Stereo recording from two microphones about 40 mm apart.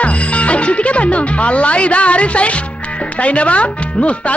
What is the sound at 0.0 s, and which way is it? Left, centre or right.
Speech, left.